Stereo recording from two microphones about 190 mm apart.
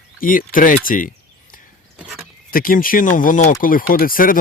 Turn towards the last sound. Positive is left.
turn(degrees=45)  # may be behind; listen again after turning